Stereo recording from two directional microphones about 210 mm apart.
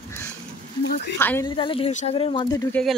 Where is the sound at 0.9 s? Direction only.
50° left (ahead or behind).